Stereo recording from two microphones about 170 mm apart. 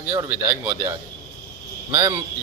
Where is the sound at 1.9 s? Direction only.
25° right (ahead or behind).